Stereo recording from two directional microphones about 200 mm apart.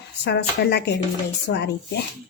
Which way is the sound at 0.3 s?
55° left (ahead or behind).